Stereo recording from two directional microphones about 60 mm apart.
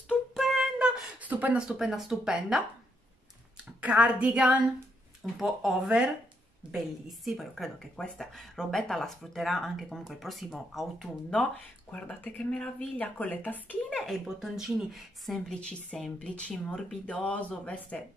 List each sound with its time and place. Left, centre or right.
0.3 s music: centre
0.7 s a sound: centre
1.2 s speech: right
1.7 s speech: centre
3.5 s a woman's voice: centre
5.2 s speech: centre
7.9 s speech: centre
11.2 s speech: centre
12.9 s speech: left
13.8 s speech: centre
14.2 s speech: centre
15.4 s speech: centre